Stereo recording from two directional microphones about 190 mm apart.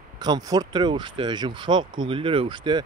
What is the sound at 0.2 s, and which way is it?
Speech, 20° right (ahead or behind).